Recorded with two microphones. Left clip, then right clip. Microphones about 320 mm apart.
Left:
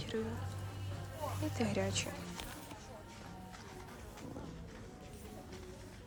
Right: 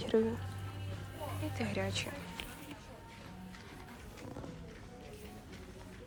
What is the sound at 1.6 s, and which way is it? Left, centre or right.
Speech, centre.